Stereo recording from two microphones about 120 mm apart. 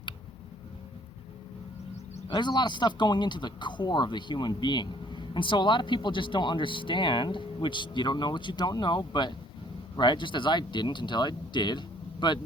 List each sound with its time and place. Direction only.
2.3 s speech: 35° left (ahead or behind)